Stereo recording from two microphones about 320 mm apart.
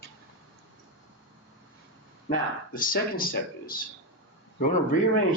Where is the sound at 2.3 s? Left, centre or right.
Left.